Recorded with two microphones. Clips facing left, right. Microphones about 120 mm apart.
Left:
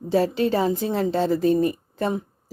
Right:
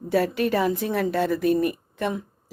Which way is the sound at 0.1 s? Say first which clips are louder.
Left 2 dB; 25° left (ahead or behind).